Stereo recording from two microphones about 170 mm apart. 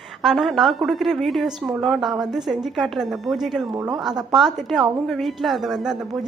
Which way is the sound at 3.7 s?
20° right (ahead or behind).